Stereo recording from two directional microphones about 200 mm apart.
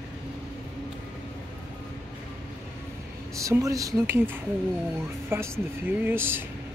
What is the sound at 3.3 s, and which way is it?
Speech, 15° right (ahead or behind).